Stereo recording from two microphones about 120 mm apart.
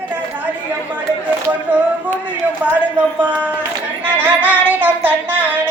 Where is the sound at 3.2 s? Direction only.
15° right (ahead or behind).